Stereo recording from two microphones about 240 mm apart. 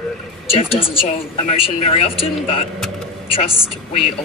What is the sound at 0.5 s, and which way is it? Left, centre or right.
A man's voice, left.